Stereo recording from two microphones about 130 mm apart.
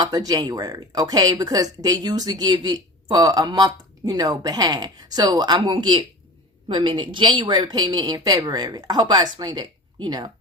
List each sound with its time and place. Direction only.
0.0 s speech: 30° right (ahead or behind)